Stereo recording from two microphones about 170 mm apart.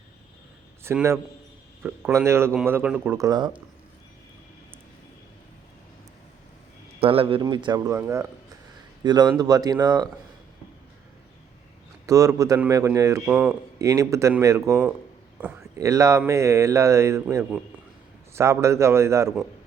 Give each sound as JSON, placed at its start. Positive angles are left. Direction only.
{"t": 0.9, "sound": "a man's voice", "side_deg": -15}
{"t": 7.0, "sound": "a man's voice", "side_deg": -35}
{"t": 7.9, "sound": "a man's voice", "side_deg": -15}
{"t": 12.0, "sound": "a man's voice", "side_deg": -20}